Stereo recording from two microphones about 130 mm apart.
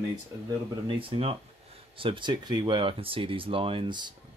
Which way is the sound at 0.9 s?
45° right (ahead or behind).